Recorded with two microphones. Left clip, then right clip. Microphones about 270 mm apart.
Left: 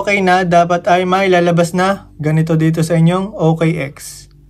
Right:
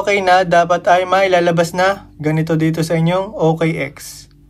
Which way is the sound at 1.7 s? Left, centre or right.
Centre.